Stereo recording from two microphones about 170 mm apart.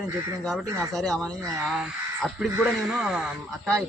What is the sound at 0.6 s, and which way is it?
Speech, 20° right (ahead or behind).